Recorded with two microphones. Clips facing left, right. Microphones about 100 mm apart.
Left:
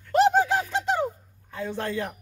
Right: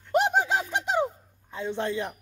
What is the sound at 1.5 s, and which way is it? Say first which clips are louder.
Speech: even; 20° right (ahead or behind).